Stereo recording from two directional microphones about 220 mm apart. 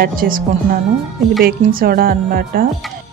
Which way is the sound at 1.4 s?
40° right (ahead or behind).